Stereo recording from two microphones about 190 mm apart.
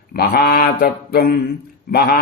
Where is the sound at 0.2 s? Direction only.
55° left (ahead or behind).